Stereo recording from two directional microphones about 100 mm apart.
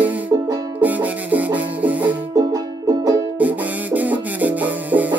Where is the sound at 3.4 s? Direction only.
15° right (ahead or behind).